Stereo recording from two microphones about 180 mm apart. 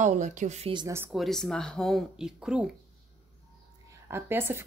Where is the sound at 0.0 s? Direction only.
40° right (ahead or behind).